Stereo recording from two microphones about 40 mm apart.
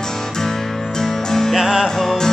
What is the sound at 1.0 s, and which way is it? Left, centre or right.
Music, centre.